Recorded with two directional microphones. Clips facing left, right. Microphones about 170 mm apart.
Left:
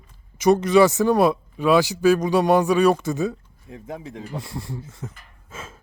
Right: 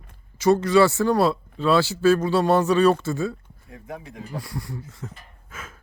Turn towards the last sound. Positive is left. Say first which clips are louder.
# left 3 dB
turn(degrees=25)  # may be behind; listen again after turning